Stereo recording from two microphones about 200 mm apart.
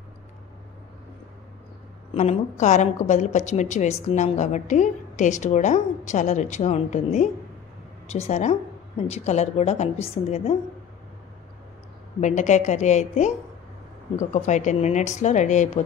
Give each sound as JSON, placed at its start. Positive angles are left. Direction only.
{"t": 2.1, "sound": "a woman's voice", "side_deg": 35}
{"t": 12.2, "sound": "a woman's voice", "side_deg": 35}
{"t": 14.3, "sound": "a woman's voice", "side_deg": 35}